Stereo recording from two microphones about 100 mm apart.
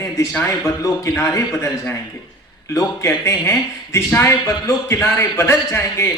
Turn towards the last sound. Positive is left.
turn(degrees=25)  # may be behind; listen again after turning